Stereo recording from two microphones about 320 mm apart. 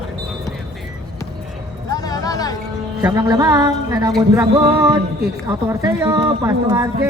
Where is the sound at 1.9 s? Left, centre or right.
Centre.